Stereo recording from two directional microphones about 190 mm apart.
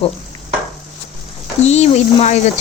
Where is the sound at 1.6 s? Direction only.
35° left (ahead or behind).